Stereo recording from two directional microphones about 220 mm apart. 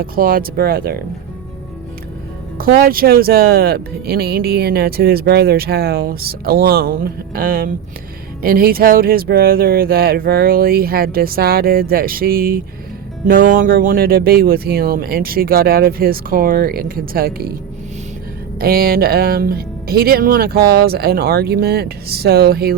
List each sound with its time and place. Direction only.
0.0 s speech: 40° right (ahead or behind)
2.6 s speech: 40° right (ahead or behind)
18.6 s speech: 45° right (ahead or behind)